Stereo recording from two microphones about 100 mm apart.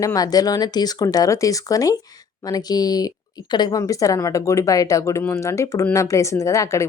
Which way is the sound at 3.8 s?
35° left (ahead or behind).